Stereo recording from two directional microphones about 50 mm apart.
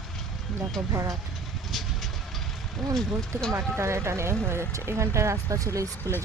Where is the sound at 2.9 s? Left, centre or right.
Centre.